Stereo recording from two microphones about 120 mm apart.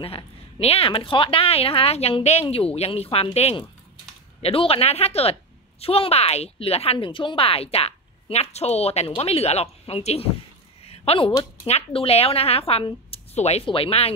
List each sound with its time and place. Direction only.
0.0 s a woman's voice: 55° left (ahead or behind)
10.9 s a sound: 50° left (ahead or behind)
11.6 s a woman's voice: 55° left (ahead or behind)
13.7 s a woman's voice: 50° left (ahead or behind)